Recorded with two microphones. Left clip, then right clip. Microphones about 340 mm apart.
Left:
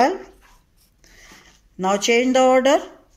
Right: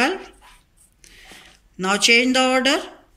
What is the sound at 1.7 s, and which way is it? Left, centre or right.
Speech, left.